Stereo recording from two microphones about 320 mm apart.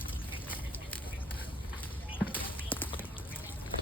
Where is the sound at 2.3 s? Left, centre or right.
Centre.